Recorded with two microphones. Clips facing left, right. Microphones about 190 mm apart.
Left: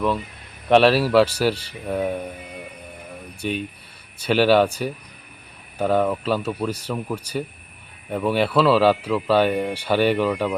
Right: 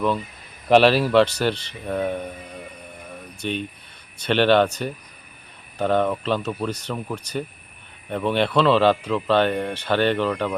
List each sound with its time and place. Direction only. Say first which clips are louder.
0.7 s speech: even; centre (ahead or behind)
3.1 s a sound: left 1 dB; 5° left (ahead or behind)
4.2 s speech: left 1 dB; 5° left (ahead or behind)